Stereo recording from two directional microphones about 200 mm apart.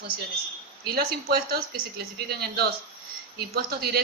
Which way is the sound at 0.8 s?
50° right (ahead or behind).